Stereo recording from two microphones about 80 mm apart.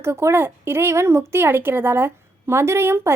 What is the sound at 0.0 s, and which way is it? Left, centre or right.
Speech, right.